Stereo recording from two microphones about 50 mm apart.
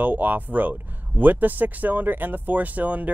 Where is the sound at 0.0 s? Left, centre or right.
Right.